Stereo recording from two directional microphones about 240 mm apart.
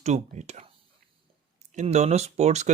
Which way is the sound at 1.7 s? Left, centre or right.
Right.